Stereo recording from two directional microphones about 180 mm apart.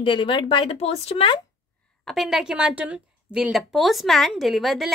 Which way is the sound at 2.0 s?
Centre (ahead or behind).